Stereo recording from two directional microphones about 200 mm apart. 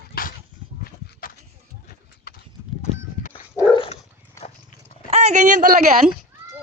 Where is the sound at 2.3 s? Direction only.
50° left (ahead or behind).